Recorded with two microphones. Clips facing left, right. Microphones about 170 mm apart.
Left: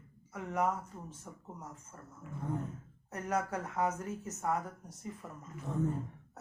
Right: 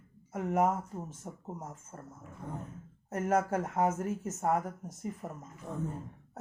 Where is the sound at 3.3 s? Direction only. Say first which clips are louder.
Right 5 dB; 50° right (ahead or behind).